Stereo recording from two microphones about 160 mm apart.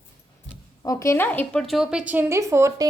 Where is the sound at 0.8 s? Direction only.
20° left (ahead or behind).